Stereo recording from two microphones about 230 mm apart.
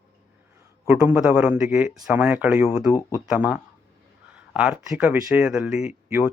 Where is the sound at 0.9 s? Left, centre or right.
Centre.